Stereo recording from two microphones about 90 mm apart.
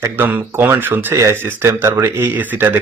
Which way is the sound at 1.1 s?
35° right (ahead or behind).